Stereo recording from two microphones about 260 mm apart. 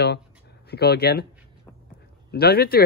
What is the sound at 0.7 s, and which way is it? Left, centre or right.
Speech, left.